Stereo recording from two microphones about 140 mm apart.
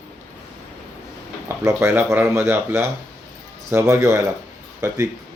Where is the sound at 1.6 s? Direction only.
20° right (ahead or behind).